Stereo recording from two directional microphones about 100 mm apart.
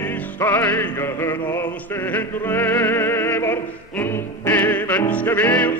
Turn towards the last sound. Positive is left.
turn(degrees=15)  # may be behind; listen again after turning